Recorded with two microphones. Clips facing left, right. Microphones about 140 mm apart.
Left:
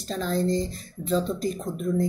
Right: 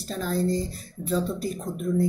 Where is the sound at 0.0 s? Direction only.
10° right (ahead or behind).